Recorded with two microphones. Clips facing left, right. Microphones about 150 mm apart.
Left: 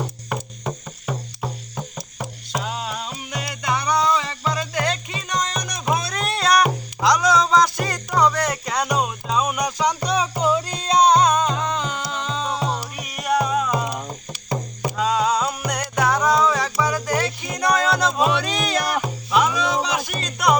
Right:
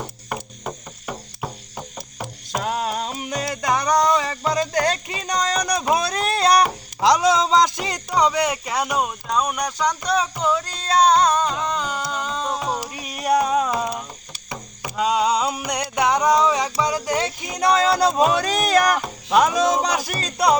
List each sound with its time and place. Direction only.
0.0 s music: centre (ahead or behind)
2.6 s music: 45° right (ahead or behind); by 12.9 s 10° right (ahead or behind)
13.1 s music: 35° right (ahead or behind)
14.9 s music: 15° right (ahead or behind); by 20.6 s 35° right (ahead or behind)